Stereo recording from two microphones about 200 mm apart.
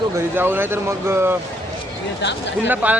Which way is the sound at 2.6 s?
10° right (ahead or behind).